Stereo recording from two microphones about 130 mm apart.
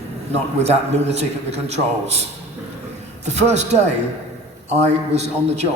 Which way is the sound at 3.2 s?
60° right (ahead or behind).